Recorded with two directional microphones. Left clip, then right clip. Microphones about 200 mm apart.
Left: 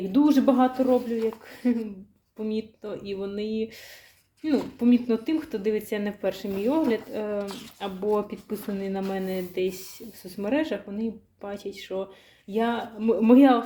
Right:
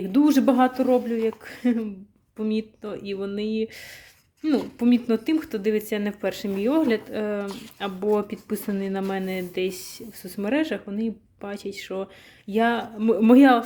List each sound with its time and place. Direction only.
0.1 s speech: 40° right (ahead or behind)